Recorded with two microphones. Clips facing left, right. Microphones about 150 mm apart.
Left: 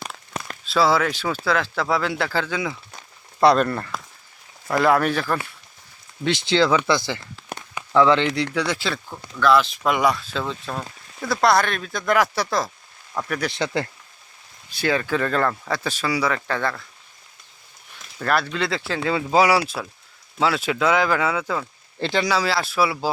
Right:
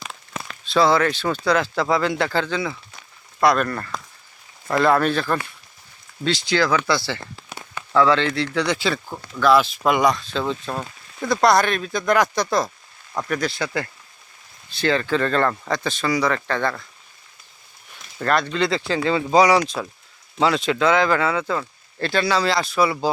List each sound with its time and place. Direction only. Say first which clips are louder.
0.6 s speech: right 2 dB; 5° left (ahead or behind)
3.4 s speech: left 2 dB; 30° left (ahead or behind)
3.9 s a sound: right 1 dB; 5° left (ahead or behind)
4.7 s speech: right 1 dB; 10° left (ahead or behind)
6.2 s speech: left 1 dB; 25° left (ahead or behind)
8.5 s speech: right 2 dB; 5° left (ahead or behind)
13.5 s speech: left 2 dB; 25° left (ahead or behind)
14.7 s speech: right 2 dB; 10° left (ahead or behind)
18.2 s speech: right 2 dB; 5° left (ahead or behind)